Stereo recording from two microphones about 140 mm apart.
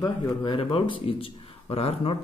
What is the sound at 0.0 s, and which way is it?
Speech, 35° left (ahead or behind).